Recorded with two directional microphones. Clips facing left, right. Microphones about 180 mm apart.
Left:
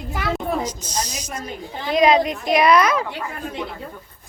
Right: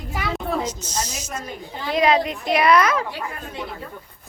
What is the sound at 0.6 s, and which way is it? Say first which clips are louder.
Speech: left 1 dB; 10° left (ahead or behind).